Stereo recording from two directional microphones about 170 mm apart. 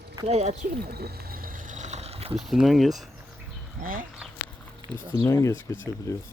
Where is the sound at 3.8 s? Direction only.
55° right (ahead or behind).